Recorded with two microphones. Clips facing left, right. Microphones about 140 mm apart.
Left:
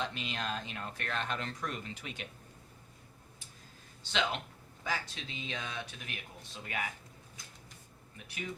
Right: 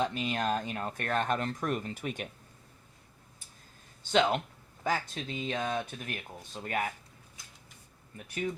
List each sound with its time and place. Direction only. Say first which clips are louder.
0.0 s speech: right 7 dB; 45° right (ahead or behind)
4.0 s speech: right 8 dB; 45° right (ahead or behind)